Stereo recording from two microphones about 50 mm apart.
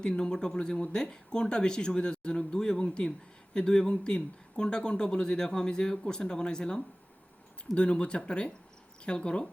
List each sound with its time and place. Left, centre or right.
0.0 s speech: centre